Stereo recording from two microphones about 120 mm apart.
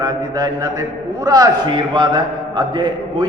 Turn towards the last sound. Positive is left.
turn(degrees=-40)  # may be behind; listen again after turning